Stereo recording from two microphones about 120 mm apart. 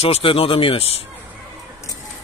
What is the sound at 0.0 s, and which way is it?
Speech, 55° left (ahead or behind).